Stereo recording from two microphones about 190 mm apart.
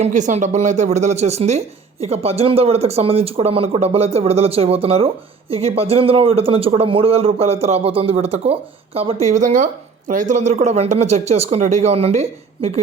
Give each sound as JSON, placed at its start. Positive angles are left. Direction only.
{"t": 0.0, "sound": "speech", "side_deg": -40}